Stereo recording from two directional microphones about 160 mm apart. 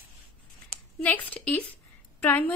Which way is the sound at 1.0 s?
10° left (ahead or behind).